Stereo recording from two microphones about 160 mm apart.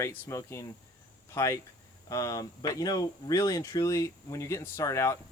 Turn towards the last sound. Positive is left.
turn(degrees=20)  # may be behind; listen again after turning